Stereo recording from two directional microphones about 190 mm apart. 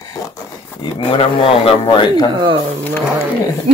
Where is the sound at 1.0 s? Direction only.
30° left (ahead or behind).